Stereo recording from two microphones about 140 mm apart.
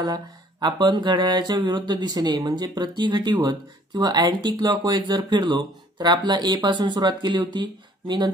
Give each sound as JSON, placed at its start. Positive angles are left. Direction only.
{"t": 0.0, "sound": "mantra", "side_deg": -30}